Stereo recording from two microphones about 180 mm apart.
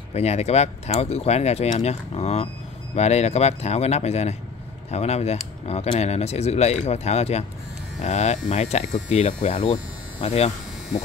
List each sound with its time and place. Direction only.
0.1 s speech: 35° left (ahead or behind)